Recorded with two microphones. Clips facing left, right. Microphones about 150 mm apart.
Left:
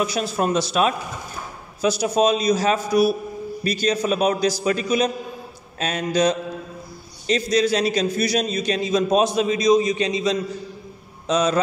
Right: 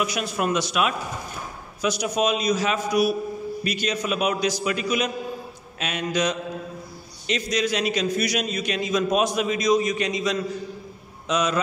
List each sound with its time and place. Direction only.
0.0 s a man's voice: 30° left (ahead or behind)